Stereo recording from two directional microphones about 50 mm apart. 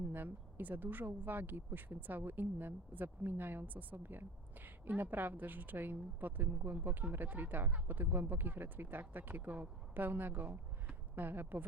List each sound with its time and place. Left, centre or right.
0.0 s speech: right